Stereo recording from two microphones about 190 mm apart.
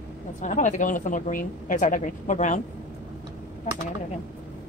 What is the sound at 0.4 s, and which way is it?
Speech, 40° left (ahead or behind).